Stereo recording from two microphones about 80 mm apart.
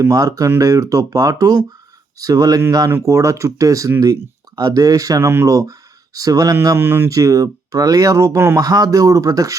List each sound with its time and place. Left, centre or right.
0.0 s speech: right
2.9 s speech: right
5.2 s speech: right
5.5 s speech: right
7.1 s speech: right
8.5 s speech: right